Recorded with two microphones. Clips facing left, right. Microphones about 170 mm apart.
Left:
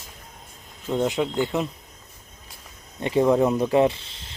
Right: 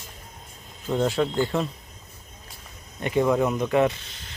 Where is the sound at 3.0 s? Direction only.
25° left (ahead or behind).